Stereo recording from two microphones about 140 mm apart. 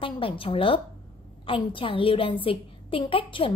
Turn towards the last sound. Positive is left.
turn(degrees=40)  # may be behind; listen again after turning